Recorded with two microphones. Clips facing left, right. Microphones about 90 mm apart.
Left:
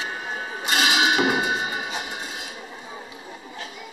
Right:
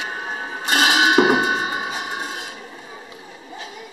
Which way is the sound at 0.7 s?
45° right (ahead or behind).